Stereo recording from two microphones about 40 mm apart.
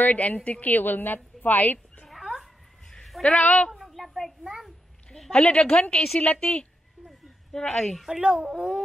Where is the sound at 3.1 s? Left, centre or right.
Centre.